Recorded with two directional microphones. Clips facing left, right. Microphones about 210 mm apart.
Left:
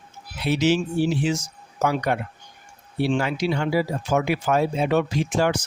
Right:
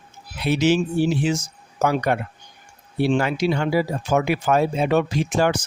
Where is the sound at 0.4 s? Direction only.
50° right (ahead or behind).